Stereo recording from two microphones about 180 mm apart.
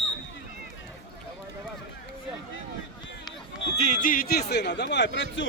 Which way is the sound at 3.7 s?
40° left (ahead or behind).